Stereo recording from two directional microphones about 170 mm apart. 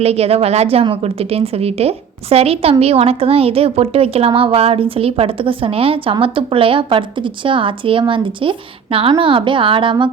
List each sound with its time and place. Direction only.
0.0 s a woman's voice: 35° right (ahead or behind)